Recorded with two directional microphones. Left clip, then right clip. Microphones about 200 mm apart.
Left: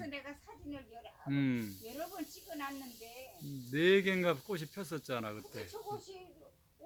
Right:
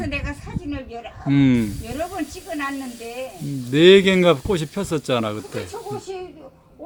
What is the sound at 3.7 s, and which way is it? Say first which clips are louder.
Speech: right 17 dB; 15° right (ahead or behind).